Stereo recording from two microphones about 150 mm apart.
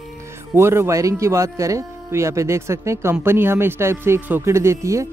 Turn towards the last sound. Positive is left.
turn(degrees=-20)  # may be behind; listen again after turning